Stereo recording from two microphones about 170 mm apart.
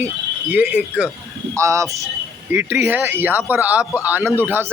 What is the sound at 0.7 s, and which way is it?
Speech, 5° right (ahead or behind).